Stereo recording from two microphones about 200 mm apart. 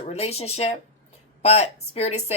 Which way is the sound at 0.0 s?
30° left (ahead or behind).